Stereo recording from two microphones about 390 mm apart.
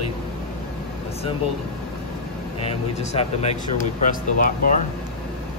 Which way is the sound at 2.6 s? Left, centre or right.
Centre.